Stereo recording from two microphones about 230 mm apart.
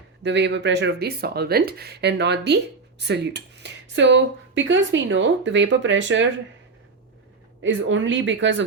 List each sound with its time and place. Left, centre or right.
0.2 s speech: right
7.6 s speech: right